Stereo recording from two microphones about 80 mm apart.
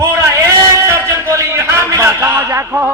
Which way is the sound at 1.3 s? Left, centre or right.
Right.